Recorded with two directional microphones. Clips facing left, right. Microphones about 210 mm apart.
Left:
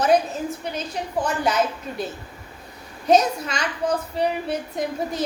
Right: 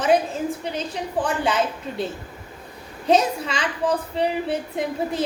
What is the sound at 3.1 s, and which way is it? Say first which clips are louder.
A woman's voice: left 1 dB; 30° right (ahead or behind).